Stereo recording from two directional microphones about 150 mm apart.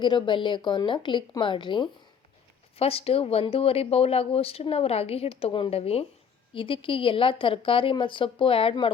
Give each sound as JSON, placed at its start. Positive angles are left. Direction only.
{"t": 0.0, "sound": "speech", "side_deg": 30}